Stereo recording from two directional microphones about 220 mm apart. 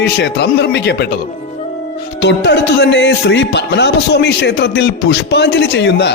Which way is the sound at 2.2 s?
50° left (ahead or behind).